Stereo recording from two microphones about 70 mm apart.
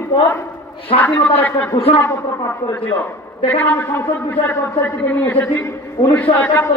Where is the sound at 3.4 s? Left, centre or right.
Left.